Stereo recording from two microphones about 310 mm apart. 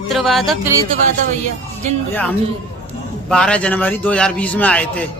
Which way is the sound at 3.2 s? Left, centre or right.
Centre.